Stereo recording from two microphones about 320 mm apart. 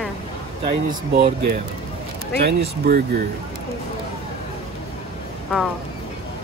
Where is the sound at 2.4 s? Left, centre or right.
Right.